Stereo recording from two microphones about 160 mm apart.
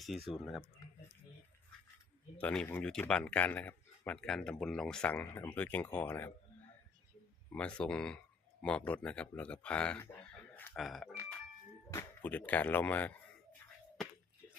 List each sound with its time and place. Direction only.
0.1 s speech: centre (ahead or behind)
2.4 s speech: 5° left (ahead or behind)
7.5 s speech: 5° left (ahead or behind)
11.9 s speech: 15° left (ahead or behind)